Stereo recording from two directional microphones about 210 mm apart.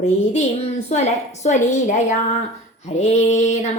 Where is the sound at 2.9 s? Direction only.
35° left (ahead or behind).